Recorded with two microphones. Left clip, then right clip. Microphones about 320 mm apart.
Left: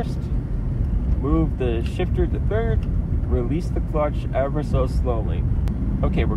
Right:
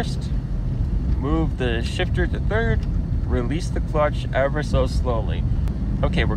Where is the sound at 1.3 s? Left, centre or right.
Right.